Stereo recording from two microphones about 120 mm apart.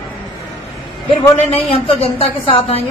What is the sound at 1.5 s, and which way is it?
Speech, 55° left (ahead or behind).